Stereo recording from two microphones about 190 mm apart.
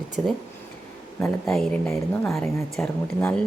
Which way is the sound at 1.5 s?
5° left (ahead or behind).